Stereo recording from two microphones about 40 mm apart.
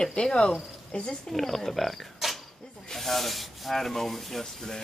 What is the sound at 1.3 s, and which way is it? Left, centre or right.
Speech, centre.